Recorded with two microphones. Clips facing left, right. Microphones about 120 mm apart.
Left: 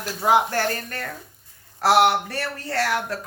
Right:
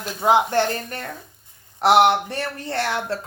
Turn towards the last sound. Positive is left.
turn(degrees=-25)  # may be behind; listen again after turning